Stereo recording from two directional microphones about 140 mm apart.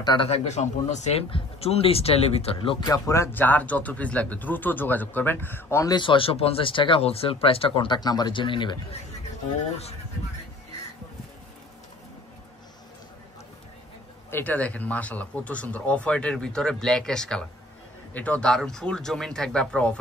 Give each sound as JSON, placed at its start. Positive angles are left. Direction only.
{"t": 0.0, "sound": "speech", "side_deg": 30}
{"t": 0.3, "sound": "speech", "side_deg": 55}
{"t": 2.9, "sound": "speech", "side_deg": 20}
{"t": 5.9, "sound": "speech", "side_deg": 40}
{"t": 14.3, "sound": "speech", "side_deg": 10}